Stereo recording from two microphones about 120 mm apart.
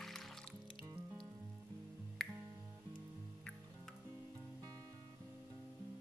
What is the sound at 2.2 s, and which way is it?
Music, 5° left (ahead or behind).